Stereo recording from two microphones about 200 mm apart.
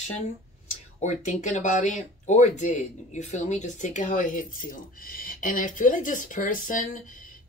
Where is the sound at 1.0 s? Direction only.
40° left (ahead or behind).